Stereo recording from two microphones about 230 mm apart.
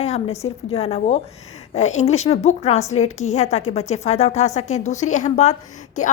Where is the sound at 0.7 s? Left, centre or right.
Left.